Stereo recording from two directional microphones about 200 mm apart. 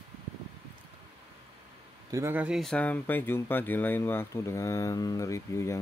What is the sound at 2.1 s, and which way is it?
Speech, 10° right (ahead or behind).